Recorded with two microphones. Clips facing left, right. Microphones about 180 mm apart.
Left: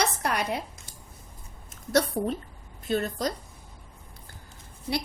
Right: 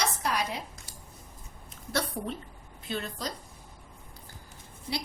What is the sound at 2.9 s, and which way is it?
Speech, 45° left (ahead or behind).